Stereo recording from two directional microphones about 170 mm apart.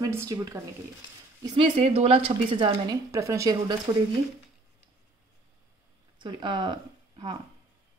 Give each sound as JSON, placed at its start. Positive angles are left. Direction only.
{"t": 0.0, "sound": "speech", "side_deg": -15}
{"t": 1.4, "sound": "a woman's voice", "side_deg": -35}
{"t": 3.1, "sound": "speech", "side_deg": -20}
{"t": 6.1, "sound": "speech", "side_deg": -25}